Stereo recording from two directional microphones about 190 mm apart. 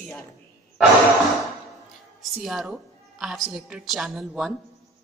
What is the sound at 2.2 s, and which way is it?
A woman's voice, centre (ahead or behind).